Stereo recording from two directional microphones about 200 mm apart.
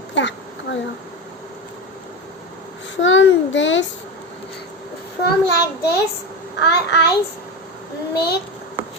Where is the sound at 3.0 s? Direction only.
70° left (ahead or behind).